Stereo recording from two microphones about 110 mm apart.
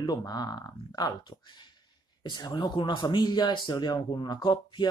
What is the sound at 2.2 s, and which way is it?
Speech, 40° left (ahead or behind).